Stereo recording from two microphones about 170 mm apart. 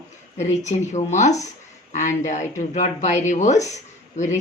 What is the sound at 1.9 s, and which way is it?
Speech, 45° left (ahead or behind).